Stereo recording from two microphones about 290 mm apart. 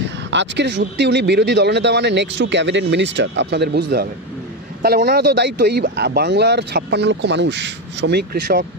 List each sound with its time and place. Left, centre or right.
0.3 s speech: right